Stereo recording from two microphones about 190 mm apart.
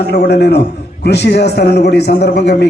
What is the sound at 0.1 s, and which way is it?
A man's voice, 60° left (ahead or behind).